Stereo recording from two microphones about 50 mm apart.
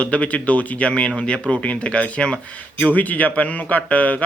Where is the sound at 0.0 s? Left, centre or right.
Left.